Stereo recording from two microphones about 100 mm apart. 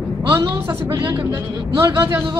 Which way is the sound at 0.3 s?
25° right (ahead or behind).